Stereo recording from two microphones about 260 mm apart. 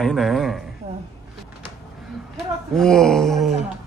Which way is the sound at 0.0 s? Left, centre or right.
Centre.